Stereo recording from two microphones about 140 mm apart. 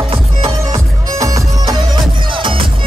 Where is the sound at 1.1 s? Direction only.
25° right (ahead or behind).